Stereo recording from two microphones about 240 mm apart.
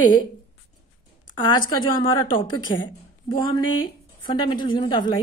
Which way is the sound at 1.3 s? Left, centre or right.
Centre.